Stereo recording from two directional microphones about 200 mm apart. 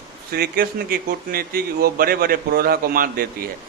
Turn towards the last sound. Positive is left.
turn(degrees=-45)  # may be behind; listen again after turning